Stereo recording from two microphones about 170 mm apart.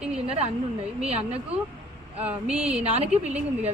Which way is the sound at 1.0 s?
40° right (ahead or behind).